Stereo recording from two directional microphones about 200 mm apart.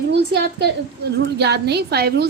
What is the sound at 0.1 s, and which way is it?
A woman's voice, 55° right (ahead or behind).